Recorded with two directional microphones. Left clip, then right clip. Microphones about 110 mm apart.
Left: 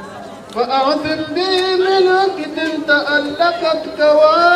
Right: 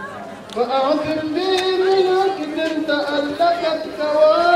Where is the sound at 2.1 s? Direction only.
45° left (ahead or behind).